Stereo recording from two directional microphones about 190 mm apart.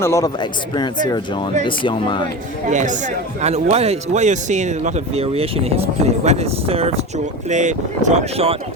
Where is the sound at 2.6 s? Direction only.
40° right (ahead or behind).